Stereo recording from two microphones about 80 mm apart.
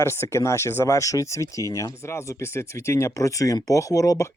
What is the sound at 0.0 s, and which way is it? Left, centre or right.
Speech, left.